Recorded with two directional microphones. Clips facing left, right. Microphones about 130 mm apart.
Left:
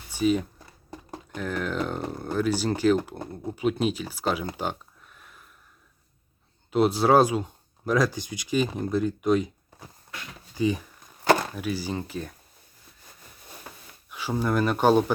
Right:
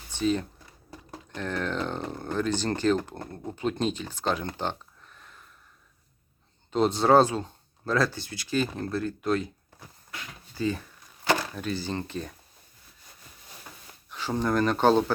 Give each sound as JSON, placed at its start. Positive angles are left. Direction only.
{"t": 0.1, "sound": "speech", "side_deg": 10}
{"t": 0.9, "sound": "a sound", "side_deg": 25}
{"t": 1.4, "sound": "speech", "side_deg": 5}
{"t": 6.7, "sound": "speech", "side_deg": 10}
{"t": 14.1, "sound": "speech", "side_deg": 10}